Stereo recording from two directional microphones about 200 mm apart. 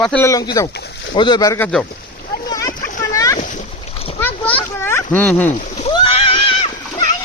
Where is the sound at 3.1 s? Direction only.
15° left (ahead or behind).